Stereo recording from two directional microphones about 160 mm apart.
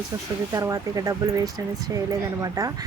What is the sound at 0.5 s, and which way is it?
Speech, 20° right (ahead or behind).